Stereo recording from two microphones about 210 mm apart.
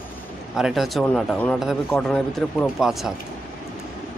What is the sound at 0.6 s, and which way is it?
A man's voice, centre (ahead or behind).